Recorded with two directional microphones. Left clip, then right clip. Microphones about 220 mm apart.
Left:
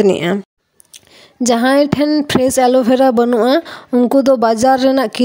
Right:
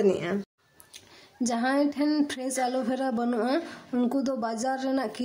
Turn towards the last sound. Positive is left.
turn(degrees=40)  # may be behind; listen again after turning